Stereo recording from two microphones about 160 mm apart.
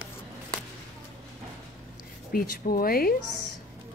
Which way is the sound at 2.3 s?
65° left (ahead or behind).